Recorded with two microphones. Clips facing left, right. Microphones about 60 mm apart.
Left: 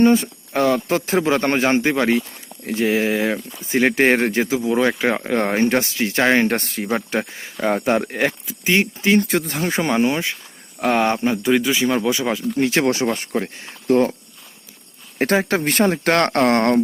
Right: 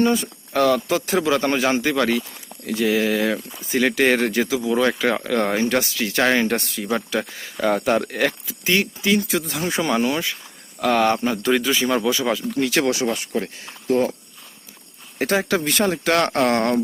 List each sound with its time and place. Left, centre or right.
0.0 s speech: left
9.2 s speech: left
11.4 s speech: centre; by 13.1 s left
13.6 s speech: left
15.2 s speech: left